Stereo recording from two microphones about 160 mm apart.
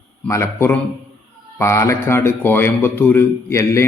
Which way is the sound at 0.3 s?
15° left (ahead or behind).